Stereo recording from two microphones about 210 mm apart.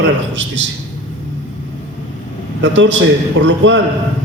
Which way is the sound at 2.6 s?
65° right (ahead or behind).